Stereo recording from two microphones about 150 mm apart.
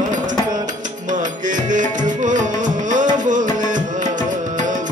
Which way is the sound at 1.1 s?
55° right (ahead or behind).